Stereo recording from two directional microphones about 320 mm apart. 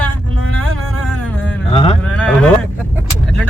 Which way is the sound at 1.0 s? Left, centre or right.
Centre.